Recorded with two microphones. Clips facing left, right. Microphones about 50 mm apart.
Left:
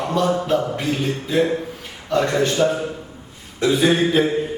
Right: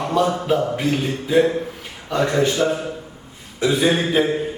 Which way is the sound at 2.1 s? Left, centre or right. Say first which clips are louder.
Even; centre.